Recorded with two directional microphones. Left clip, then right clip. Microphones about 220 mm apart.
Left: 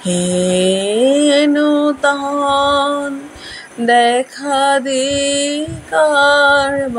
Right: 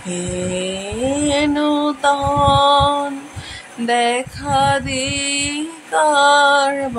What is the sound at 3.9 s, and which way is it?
Female singing, 15° left (ahead or behind).